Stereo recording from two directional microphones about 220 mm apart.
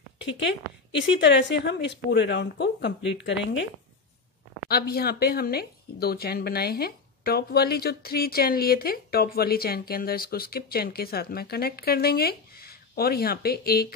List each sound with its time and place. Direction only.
0.2 s a woman's voice: 55° left (ahead or behind)
4.6 s a woman's voice: 45° left (ahead or behind)